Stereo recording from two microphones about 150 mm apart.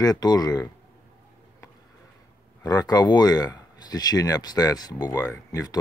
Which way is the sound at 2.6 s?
25° left (ahead or behind).